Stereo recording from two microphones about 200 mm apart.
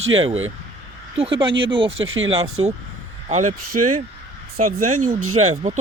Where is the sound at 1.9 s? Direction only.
75° right (ahead or behind).